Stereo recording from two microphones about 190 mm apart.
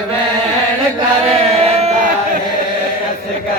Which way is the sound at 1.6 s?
35° right (ahead or behind).